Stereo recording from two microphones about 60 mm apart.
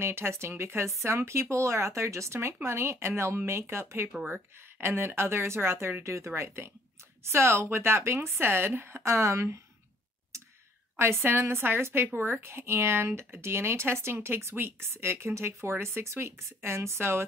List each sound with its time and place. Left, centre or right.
0.0 s speech: right
6.0 s speech: right
11.0 s a woman's voice: right